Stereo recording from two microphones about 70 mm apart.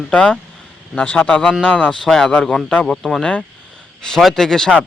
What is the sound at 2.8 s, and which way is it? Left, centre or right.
Speech, centre.